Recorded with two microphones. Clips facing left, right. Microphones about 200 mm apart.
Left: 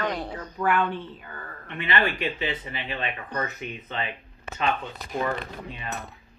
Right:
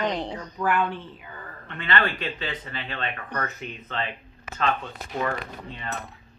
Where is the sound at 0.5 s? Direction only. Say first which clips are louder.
Left 1 dB; 5° left (ahead or behind).